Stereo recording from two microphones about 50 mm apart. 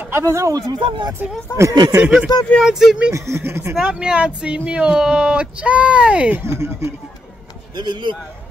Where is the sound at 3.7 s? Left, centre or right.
Centre.